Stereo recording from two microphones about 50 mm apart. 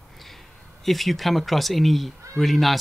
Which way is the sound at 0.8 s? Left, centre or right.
Centre.